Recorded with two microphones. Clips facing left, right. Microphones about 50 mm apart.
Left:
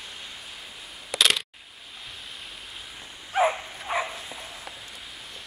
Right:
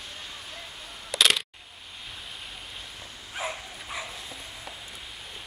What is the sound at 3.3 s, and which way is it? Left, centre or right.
Dog, left.